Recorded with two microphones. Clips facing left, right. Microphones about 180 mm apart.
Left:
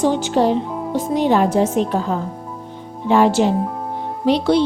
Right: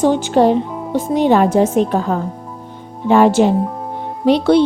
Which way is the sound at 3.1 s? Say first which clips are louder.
Right 3 dB; 55° right (ahead or behind).